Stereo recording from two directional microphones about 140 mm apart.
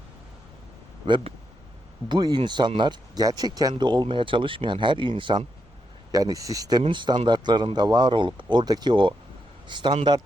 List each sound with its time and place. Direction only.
1.0 s speech: 35° right (ahead or behind)